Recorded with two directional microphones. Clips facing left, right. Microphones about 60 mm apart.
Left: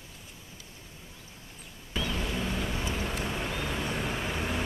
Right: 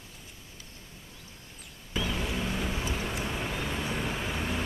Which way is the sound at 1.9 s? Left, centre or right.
Centre.